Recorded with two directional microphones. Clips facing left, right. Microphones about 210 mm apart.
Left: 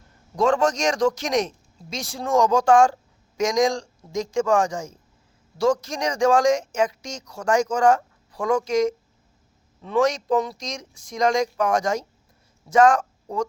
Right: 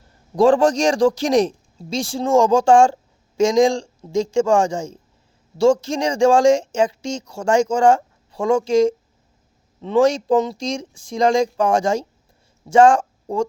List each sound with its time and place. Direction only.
0.3 s a man's voice: 30° right (ahead or behind)